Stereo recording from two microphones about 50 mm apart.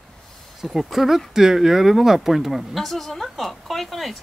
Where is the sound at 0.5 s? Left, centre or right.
Centre.